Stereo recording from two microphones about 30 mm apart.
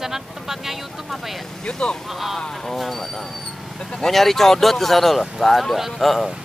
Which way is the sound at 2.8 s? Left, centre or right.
Centre.